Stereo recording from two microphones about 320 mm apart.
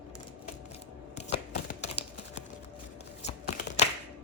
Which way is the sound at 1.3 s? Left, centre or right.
Left.